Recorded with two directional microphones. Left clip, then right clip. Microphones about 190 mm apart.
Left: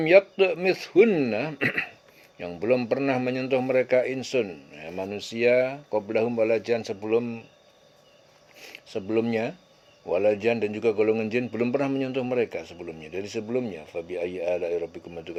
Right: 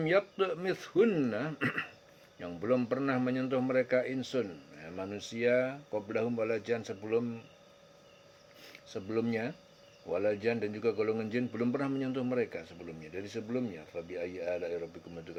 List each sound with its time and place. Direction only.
0.0 s a man's voice: 30° left (ahead or behind)
8.6 s a man's voice: 30° left (ahead or behind)